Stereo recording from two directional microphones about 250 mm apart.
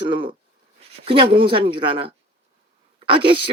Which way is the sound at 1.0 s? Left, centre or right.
Right.